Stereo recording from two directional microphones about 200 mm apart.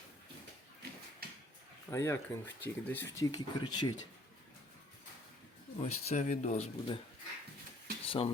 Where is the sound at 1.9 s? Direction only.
15° left (ahead or behind).